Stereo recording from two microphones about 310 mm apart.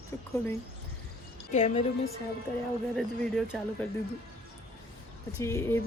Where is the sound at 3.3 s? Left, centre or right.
Centre.